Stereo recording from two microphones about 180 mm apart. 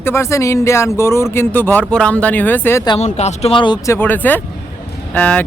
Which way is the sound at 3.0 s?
40° left (ahead or behind).